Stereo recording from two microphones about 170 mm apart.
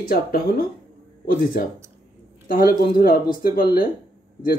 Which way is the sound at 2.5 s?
55° left (ahead or behind).